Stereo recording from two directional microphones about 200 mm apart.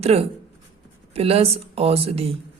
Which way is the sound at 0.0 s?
30° right (ahead or behind).